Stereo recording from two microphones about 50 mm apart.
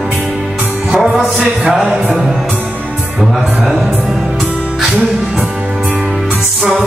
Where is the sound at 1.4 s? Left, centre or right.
Right.